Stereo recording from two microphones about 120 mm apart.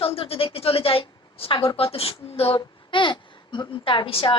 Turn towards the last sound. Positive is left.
turn(degrees=50)  # may be behind; listen again after turning